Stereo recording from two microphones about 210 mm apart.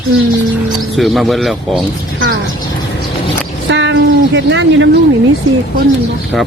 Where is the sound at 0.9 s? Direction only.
Centre (ahead or behind).